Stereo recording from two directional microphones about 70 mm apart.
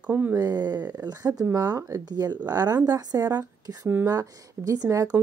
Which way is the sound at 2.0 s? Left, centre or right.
Right.